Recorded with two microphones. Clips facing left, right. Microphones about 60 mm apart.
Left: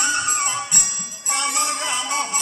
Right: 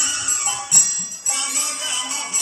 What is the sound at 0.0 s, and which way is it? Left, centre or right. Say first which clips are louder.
Music: left 6 dB; left.